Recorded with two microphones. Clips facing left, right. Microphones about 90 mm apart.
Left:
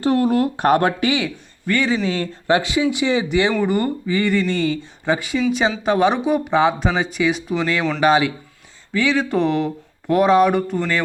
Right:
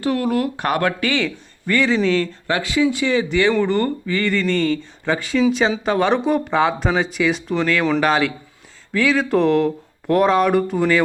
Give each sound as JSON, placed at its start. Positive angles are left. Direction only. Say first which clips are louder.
{"t": 0.0, "sound": "speech", "louder": "left 3 dB", "side_deg": 30}
{"t": 1.6, "sound": "speech", "louder": "right 2 dB", "side_deg": 5}
{"t": 2.5, "sound": "speech", "louder": "left 2 dB", "side_deg": 20}